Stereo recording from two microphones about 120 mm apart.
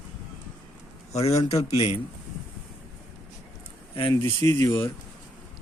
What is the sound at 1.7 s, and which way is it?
Speech, 55° left (ahead or behind).